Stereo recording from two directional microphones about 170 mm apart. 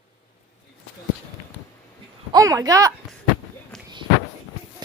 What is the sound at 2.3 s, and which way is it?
Speech, 20° right (ahead or behind).